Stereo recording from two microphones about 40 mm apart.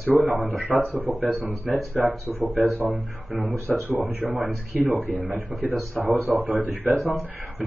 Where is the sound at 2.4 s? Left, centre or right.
Right.